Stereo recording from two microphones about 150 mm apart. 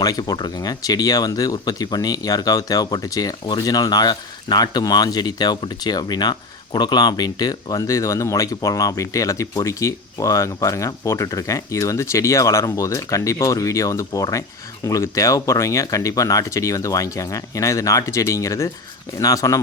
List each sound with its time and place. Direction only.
0.0 s speech: 25° left (ahead or behind)